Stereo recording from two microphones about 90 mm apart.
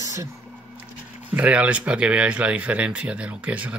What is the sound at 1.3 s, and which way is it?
Speech, 15° right (ahead or behind).